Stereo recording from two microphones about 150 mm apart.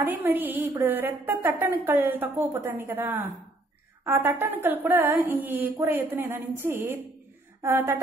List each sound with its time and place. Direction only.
0.0 s a woman's voice: 10° right (ahead or behind)